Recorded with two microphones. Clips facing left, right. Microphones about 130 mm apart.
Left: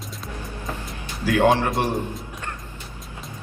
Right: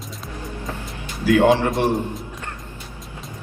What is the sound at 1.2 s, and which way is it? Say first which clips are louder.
Speech: right 3 dB; 15° right (ahead or behind).